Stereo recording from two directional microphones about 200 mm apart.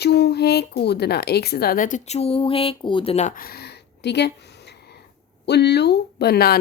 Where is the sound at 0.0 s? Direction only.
55° left (ahead or behind).